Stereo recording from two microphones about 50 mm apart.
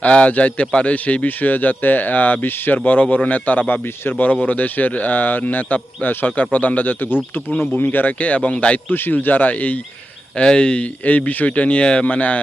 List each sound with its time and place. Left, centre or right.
0.0 s a man's voice: left
8.9 s a man's voice: left
10.3 s speech: centre
11.3 s speech: left